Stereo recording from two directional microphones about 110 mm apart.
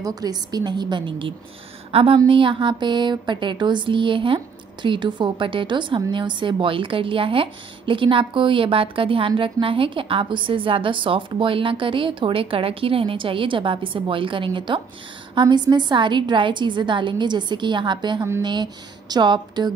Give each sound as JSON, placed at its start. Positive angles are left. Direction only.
{"t": 0.0, "sound": "a woman's voice", "side_deg": -35}
{"t": 1.9, "sound": "a woman's voice", "side_deg": -60}